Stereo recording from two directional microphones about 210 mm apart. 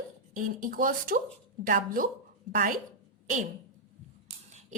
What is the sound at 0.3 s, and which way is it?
A woman's voice, 40° right (ahead or behind).